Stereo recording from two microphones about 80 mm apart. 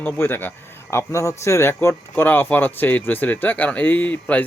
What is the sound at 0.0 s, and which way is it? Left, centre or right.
A man's voice, left.